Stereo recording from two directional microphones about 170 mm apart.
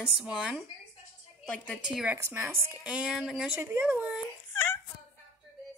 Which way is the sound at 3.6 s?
15° right (ahead or behind).